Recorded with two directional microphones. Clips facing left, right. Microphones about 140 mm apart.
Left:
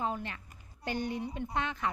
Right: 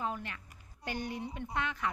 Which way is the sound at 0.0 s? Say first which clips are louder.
Left 3 dB; 30° left (ahead or behind).